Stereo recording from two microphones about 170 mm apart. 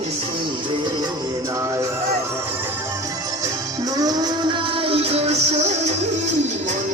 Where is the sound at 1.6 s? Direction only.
20° right (ahead or behind).